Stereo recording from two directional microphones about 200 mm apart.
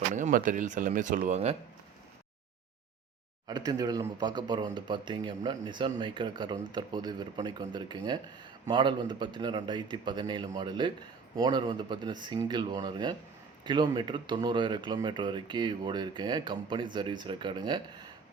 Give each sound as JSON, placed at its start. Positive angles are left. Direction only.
{"t": 0.1, "sound": "speech", "side_deg": -40}
{"t": 3.4, "sound": "speech", "side_deg": -20}